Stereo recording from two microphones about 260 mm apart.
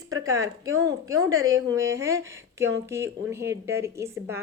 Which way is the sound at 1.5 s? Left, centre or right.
Centre.